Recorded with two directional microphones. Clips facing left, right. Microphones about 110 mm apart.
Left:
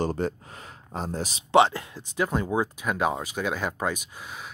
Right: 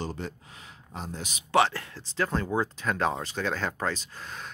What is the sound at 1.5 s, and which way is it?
Speech, 20° left (ahead or behind).